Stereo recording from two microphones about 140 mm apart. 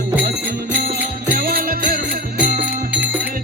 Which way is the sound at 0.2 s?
85° right.